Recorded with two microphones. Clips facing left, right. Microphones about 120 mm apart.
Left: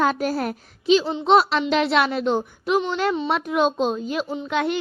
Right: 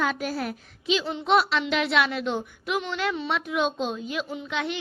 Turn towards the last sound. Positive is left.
turn(degrees=45)  # may be behind; listen again after turning